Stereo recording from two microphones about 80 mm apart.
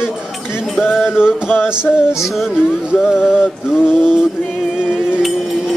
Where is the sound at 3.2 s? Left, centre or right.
Centre.